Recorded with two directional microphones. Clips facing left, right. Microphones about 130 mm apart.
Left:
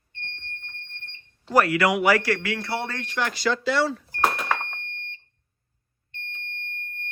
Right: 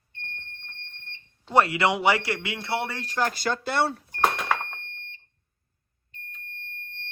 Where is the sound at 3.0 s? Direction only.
40° right (ahead or behind).